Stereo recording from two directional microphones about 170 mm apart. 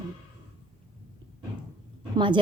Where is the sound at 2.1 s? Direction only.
30° right (ahead or behind).